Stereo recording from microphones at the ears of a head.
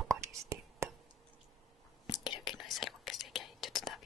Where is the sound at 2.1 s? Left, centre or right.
Left.